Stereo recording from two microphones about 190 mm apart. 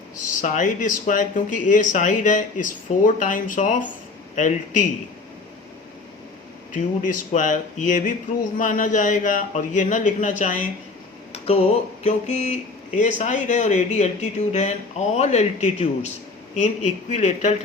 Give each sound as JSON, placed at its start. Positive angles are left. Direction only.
{"t": 0.4, "sound": "speech", "side_deg": 45}
{"t": 6.7, "sound": "speech", "side_deg": 45}